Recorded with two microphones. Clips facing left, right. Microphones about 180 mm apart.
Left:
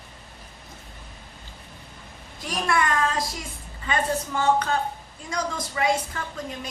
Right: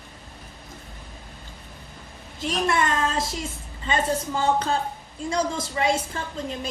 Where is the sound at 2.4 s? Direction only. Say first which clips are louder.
Right 1 dB; 25° right (ahead or behind).